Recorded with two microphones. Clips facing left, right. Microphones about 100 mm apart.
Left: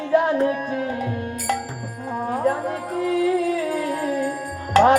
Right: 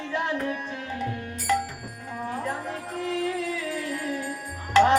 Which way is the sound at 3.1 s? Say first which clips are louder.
Left 9 dB; 45° left (ahead or behind).